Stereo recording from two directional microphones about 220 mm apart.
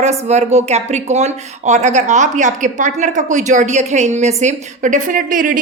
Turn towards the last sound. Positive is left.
turn(degrees=-40)  # may be behind; listen again after turning